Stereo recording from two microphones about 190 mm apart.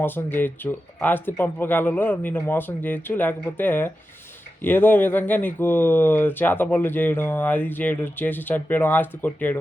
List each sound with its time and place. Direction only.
0.0 s speech: 10° left (ahead or behind)